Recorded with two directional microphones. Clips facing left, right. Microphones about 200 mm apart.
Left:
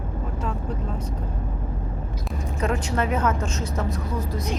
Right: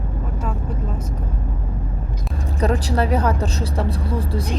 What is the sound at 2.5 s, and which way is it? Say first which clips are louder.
Speech: right 5 dB; 35° right (ahead or behind).